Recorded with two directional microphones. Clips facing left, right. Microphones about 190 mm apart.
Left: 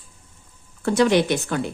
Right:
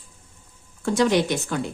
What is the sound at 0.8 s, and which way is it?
Speech, 65° left (ahead or behind).